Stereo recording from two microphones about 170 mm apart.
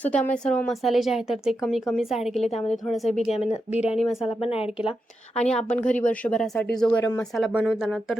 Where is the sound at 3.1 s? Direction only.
40° left (ahead or behind).